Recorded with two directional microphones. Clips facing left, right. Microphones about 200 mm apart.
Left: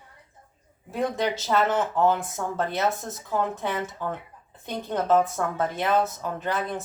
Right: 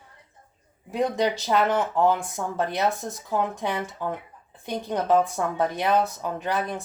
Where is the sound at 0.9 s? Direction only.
15° right (ahead or behind).